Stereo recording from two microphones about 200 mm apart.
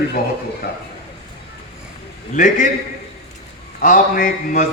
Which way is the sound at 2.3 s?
40° left (ahead or behind).